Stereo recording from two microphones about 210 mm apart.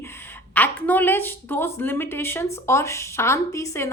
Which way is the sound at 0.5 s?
10° left (ahead or behind).